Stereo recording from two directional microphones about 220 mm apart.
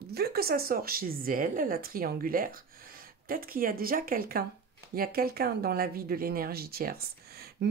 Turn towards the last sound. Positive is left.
turn(degrees=-45)  # may be behind; listen again after turning